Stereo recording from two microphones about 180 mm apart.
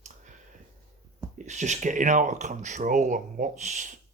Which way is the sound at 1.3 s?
40° right (ahead or behind).